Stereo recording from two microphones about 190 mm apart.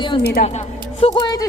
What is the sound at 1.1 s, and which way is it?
Speech, 20° left (ahead or behind).